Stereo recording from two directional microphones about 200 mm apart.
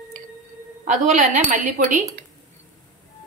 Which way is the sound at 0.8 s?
35° right (ahead or behind).